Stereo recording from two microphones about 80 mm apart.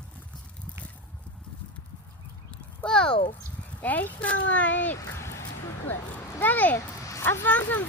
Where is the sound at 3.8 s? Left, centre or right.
Left.